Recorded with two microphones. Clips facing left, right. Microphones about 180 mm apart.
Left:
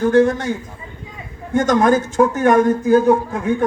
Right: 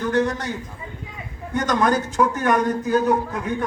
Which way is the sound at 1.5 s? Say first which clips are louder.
Left 6 dB; 45° left (ahead or behind).